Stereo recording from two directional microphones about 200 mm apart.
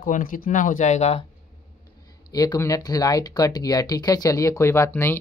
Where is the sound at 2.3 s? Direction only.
20° left (ahead or behind).